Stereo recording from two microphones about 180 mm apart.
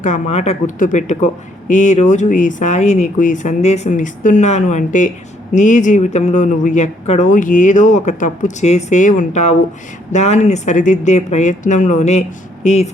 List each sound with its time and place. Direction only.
0.0 s speech: 40° left (ahead or behind)